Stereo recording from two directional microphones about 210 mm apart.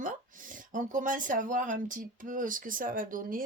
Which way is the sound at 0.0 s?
40° right (ahead or behind).